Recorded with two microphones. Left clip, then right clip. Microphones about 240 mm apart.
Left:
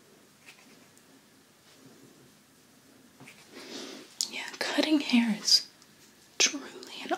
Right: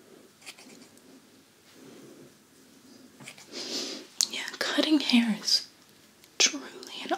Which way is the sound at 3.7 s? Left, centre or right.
Centre.